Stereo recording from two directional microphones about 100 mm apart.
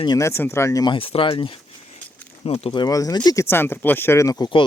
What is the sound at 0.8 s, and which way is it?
Speech, 65° left (ahead or behind).